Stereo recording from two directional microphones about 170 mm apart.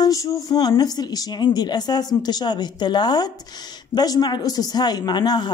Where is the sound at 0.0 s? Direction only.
20° left (ahead or behind).